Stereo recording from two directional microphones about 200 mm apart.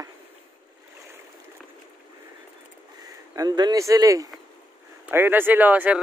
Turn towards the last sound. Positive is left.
turn(degrees=-10)  # may be behind; listen again after turning